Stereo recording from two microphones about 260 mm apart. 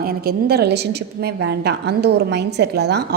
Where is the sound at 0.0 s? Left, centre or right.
Right.